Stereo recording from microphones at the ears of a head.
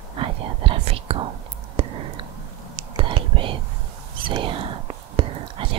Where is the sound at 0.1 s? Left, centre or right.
Right.